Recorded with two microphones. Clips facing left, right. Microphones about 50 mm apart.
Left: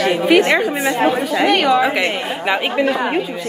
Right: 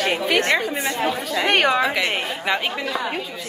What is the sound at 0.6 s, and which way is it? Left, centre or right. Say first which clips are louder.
Speech: left 6 dB; left.